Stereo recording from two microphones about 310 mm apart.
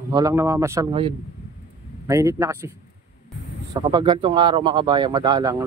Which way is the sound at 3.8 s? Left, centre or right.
Centre.